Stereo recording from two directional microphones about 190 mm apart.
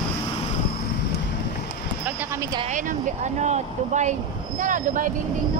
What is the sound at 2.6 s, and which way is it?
Speech, 40° right (ahead or behind).